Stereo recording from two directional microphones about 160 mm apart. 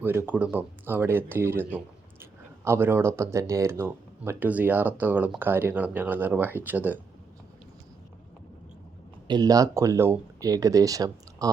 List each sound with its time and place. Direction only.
0.0 s speech: 15° right (ahead or behind)
9.2 s speech: 25° right (ahead or behind)